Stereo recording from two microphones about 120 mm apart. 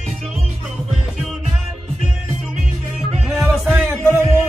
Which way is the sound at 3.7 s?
20° right (ahead or behind).